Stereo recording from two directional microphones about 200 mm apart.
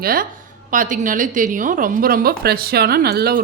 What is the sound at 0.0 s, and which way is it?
A woman's voice, 45° right (ahead or behind).